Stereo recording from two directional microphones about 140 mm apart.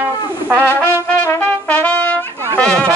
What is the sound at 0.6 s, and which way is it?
Trumpet, 15° left (ahead or behind).